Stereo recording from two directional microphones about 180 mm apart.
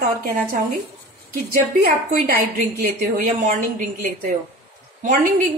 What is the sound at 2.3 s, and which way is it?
A woman's voice, 50° right (ahead or behind).